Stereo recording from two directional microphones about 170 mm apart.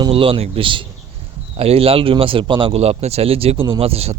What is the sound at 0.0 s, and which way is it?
A man's voice, 30° right (ahead or behind).